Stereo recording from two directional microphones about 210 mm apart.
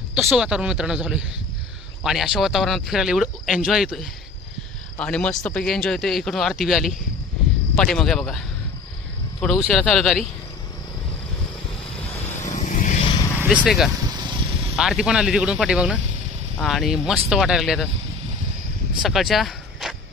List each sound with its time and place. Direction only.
0.1 s speech: centre (ahead or behind)
9.7 s speech: centre (ahead or behind)
12.4 s vehicle: 35° left (ahead or behind)
13.4 s speech: 5° right (ahead or behind)
14.1 s a sound: 20° right (ahead or behind)
14.8 s speech: 5° right (ahead or behind)
19.0 s a sound: centre (ahead or behind)